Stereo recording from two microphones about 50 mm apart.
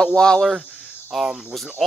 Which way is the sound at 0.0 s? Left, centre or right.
Centre.